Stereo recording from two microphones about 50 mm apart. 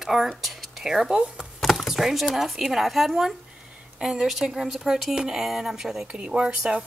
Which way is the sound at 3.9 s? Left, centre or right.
Centre.